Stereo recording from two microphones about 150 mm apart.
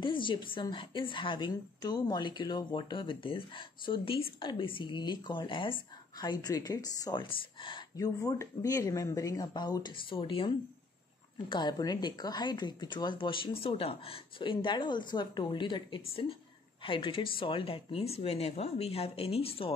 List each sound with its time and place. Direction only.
0.0 s a woman's voice: 35° left (ahead or behind)